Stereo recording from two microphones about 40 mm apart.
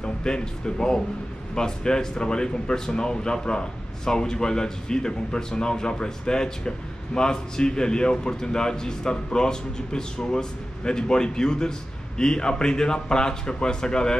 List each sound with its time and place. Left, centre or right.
0.0 s speech: left